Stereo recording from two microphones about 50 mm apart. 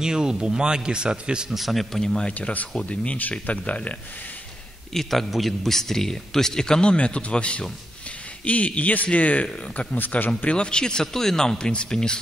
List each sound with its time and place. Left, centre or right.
0.0 s speech: centre
1.5 s speech: centre
2.0 s a man's voice: centre
2.3 s a man's voice: left
4.9 s a man's voice: centre; by 10.5 s left
10.5 s a man's voice: centre